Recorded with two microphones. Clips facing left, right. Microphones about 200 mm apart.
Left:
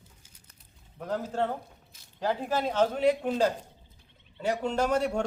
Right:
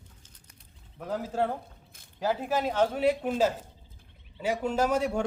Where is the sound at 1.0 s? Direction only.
5° right (ahead or behind).